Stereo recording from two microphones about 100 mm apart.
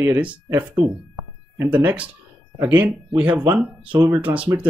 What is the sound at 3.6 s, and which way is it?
Speech, 5° right (ahead or behind).